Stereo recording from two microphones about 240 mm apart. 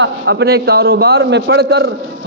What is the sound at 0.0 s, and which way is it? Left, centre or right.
A man's voice, right.